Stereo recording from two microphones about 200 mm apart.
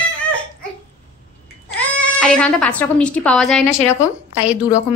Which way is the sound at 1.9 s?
5° left (ahead or behind).